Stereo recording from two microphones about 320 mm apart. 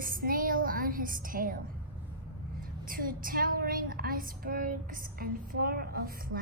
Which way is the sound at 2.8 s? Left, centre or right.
Right.